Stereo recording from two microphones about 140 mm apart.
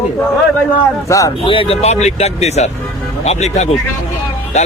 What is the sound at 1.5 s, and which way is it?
A man's voice, 40° left (ahead or behind).